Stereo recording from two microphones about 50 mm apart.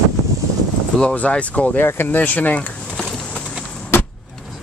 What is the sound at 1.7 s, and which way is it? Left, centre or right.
Speech, left.